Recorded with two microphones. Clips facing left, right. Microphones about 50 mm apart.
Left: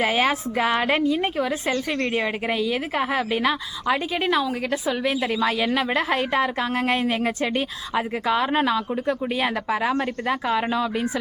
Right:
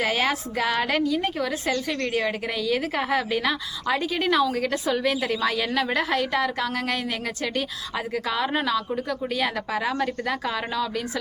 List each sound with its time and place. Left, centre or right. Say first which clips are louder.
0.0 s a woman's voice: left 3 dB; centre